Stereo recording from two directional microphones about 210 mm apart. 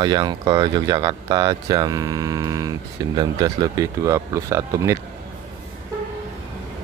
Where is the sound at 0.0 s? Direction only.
20° right (ahead or behind).